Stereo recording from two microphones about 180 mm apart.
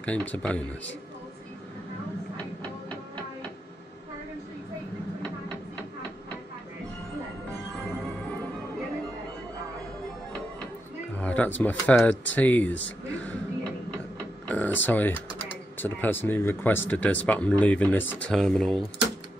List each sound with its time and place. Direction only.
0.0 s speech: 10° left (ahead or behind)
11.1 s speech: 10° left (ahead or behind)
14.5 s tick-tock: 10° left (ahead or behind)
14.9 s speech: 10° left (ahead or behind)